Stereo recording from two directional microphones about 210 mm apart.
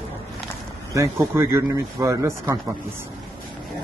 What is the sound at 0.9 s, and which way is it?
Speech, 10° right (ahead or behind).